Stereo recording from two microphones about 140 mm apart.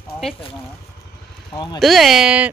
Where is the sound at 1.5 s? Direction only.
30° left (ahead or behind).